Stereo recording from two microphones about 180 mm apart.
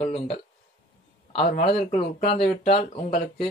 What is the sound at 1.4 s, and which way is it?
Speech, 45° left (ahead or behind).